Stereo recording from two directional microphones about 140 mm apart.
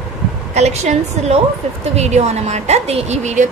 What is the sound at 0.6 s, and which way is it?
A woman's voice, 50° right (ahead or behind).